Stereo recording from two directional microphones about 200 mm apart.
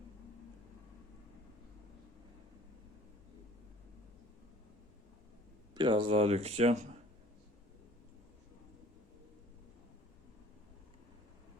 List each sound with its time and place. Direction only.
5.7 s speech: 25° right (ahead or behind)